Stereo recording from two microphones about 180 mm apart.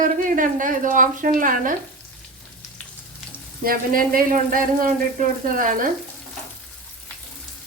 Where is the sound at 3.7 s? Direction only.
55° right (ahead or behind).